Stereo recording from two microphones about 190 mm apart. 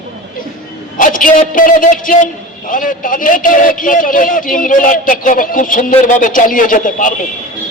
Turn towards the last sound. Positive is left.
turn(degrees=45)  # may be behind; listen again after turning